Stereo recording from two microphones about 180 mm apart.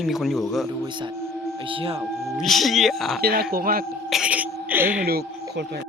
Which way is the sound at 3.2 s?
55° right (ahead or behind).